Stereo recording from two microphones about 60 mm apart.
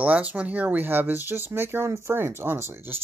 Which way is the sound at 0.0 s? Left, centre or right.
Right.